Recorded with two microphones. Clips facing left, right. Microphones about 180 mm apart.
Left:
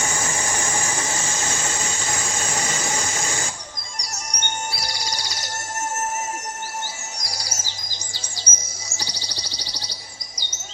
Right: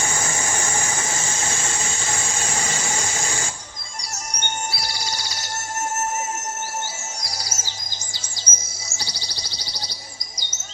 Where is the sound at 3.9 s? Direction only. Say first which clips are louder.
Right 1 dB; 35° left (ahead or behind).